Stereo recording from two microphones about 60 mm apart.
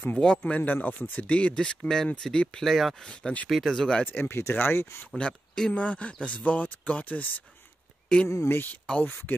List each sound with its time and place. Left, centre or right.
0.1 s speech: centre
0.4 s speech: left
1.3 s speech: centre
2.6 s speech: centre
3.1 s speech: centre
3.4 s speech: centre
3.7 s speech: centre
4.0 s speech: left
5.1 s speech: centre
8.1 s speech: centre
8.5 s speech: left